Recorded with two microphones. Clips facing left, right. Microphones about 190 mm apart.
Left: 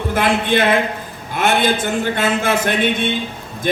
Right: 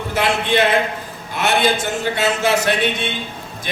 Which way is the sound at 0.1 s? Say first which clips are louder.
Left 2 dB; 50° left (ahead or behind).